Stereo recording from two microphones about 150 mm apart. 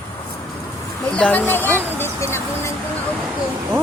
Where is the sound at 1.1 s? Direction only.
5° left (ahead or behind).